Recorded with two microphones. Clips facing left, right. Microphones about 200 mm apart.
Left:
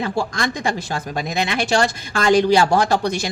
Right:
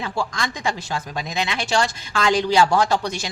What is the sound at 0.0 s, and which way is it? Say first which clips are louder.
Speech: left 4 dB; 55° left (ahead or behind).